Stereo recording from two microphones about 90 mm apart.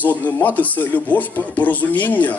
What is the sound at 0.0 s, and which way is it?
Speech, 20° left (ahead or behind).